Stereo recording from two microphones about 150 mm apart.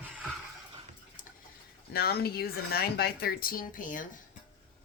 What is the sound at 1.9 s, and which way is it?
Speech, 90° left.